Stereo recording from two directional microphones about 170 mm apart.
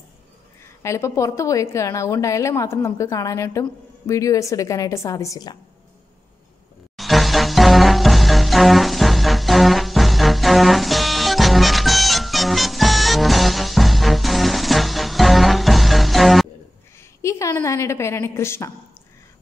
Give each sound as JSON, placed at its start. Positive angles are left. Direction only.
{"t": 0.8, "sound": "a woman's voice", "side_deg": 15}
{"t": 7.0, "sound": "music", "side_deg": 0}
{"t": 17.2, "sound": "a woman's voice", "side_deg": 15}